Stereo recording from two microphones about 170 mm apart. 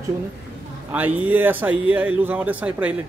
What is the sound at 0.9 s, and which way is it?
Speech, 10° right (ahead or behind).